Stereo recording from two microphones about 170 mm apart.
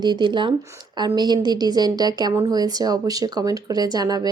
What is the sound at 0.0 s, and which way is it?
Speech, 25° right (ahead or behind).